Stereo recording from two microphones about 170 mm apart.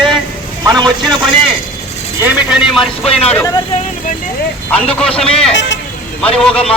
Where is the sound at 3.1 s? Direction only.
35° left (ahead or behind).